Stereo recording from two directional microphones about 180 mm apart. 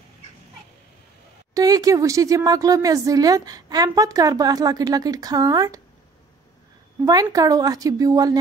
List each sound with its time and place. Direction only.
1.5 s a woman's voice: 20° right (ahead or behind)
7.1 s a woman's voice: 20° right (ahead or behind)